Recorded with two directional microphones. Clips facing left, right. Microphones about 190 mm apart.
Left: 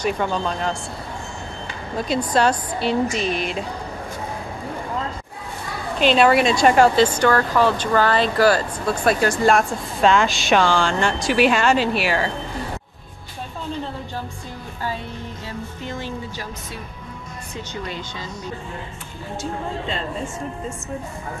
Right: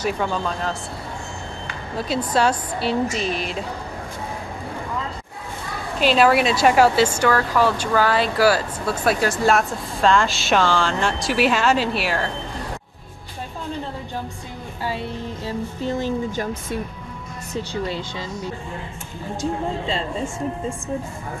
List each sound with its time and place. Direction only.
2.0 s speech: 5° right (ahead or behind)
5.9 s speech: 5° right (ahead or behind)
15.4 s speech: 40° right (ahead or behind)